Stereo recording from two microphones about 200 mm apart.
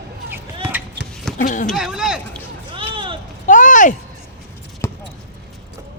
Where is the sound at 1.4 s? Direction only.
40° left (ahead or behind).